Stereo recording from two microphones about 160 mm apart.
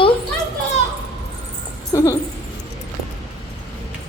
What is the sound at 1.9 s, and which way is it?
Speech, 20° left (ahead or behind).